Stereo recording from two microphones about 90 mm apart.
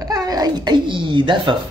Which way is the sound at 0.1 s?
45° right (ahead or behind).